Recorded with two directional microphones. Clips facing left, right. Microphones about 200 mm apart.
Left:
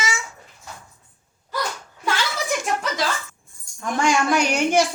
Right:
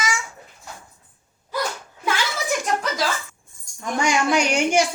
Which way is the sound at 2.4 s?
Centre (ahead or behind).